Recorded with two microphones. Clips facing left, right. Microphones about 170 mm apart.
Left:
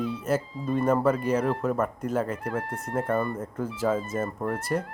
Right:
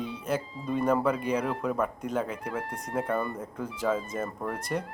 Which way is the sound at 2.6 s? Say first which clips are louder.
Left 3 dB; 50° left (ahead or behind).